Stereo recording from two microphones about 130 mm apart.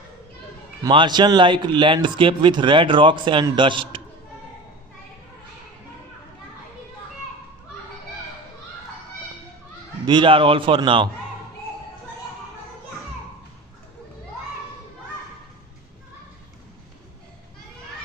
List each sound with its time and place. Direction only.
0.8 s speech: 35° right (ahead or behind)
10.0 s speech: 40° right (ahead or behind)